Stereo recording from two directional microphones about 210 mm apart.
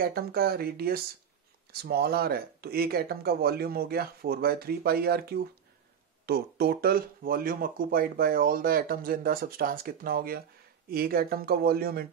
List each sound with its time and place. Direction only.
0.0 s speech: 45° right (ahead or behind)